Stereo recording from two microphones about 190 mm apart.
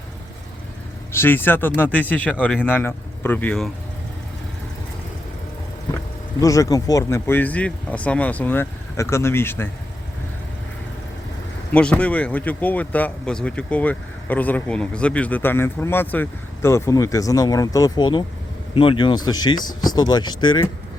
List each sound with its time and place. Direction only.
1.1 s speech: 10° left (ahead or behind)
6.4 s speech: 15° left (ahead or behind)
11.7 s speech: 5° left (ahead or behind); by 20.7 s 25° left (ahead or behind)